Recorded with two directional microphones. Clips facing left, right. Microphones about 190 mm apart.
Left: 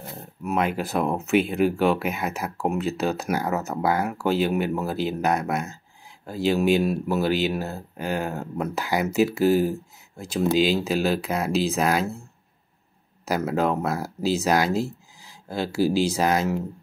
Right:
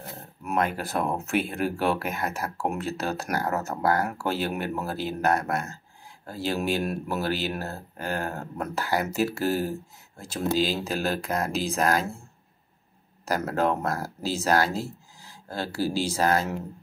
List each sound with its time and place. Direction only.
0.5 s speech: 10° left (ahead or behind)
10.5 s speech: 40° right (ahead or behind)
10.8 s speech: 10° left (ahead or behind)
13.3 s speech: 10° left (ahead or behind)